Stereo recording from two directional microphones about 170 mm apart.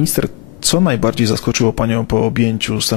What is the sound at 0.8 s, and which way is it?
Speech, 15° left (ahead or behind).